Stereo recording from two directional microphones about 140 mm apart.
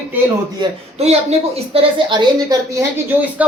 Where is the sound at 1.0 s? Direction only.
50° right (ahead or behind); by 2.8 s 30° right (ahead or behind).